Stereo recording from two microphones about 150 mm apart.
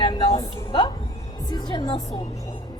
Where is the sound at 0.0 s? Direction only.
30° left (ahead or behind).